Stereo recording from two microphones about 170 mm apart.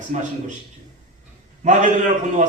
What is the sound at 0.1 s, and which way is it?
Speech, 45° right (ahead or behind).